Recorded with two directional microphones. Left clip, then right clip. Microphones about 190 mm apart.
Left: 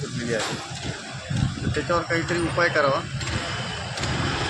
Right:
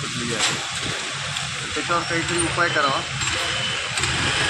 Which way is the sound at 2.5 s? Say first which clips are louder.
Even; 25° left (ahead or behind).